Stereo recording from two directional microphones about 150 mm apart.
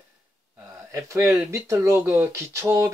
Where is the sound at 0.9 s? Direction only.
20° right (ahead or behind).